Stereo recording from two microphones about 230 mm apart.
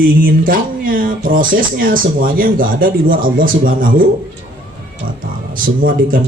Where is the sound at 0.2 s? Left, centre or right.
Right.